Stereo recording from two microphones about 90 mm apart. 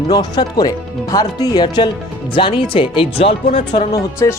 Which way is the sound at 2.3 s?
70° left (ahead or behind).